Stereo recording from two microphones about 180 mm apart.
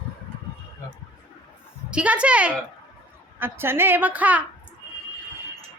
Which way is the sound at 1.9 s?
5° right (ahead or behind).